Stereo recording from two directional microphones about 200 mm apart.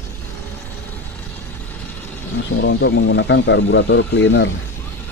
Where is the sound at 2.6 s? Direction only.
60° left (ahead or behind).